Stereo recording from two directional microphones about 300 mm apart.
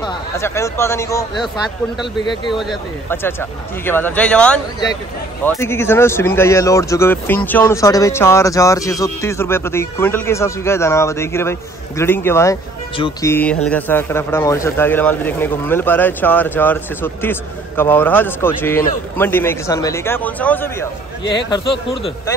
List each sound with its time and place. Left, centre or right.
0.0 s speech: centre
2.6 s speech: centre